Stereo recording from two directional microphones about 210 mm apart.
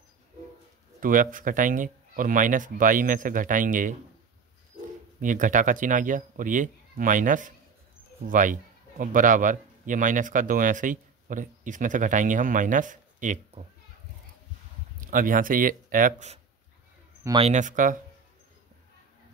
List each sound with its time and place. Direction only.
1.0 s speech: 40° right (ahead or behind)
5.2 s speech: 40° right (ahead or behind)
15.0 s speech: 40° right (ahead or behind)
17.2 s speech: 20° right (ahead or behind)
17.5 s speech: 35° right (ahead or behind)